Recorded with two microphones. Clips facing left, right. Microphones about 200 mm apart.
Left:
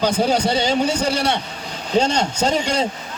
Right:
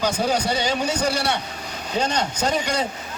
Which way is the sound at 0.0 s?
30° left (ahead or behind).